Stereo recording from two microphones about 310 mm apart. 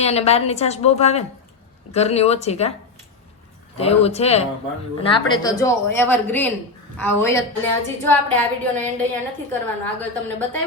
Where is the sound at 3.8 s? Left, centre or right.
Centre.